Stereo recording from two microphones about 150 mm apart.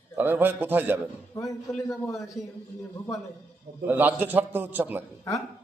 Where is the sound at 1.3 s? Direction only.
20° left (ahead or behind).